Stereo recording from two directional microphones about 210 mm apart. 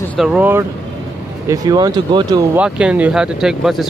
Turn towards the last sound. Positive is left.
turn(degrees=0)  # may be behind; listen again after turning